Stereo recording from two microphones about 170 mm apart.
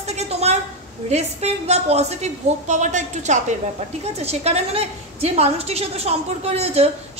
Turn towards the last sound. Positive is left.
turn(degrees=-40)  # may be behind; listen again after turning